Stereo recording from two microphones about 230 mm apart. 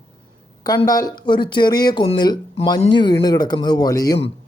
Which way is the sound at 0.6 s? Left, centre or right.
Centre.